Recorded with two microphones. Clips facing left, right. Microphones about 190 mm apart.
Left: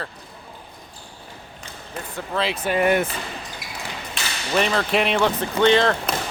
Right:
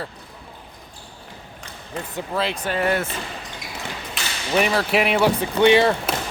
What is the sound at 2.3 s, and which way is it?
Speech, centre (ahead or behind).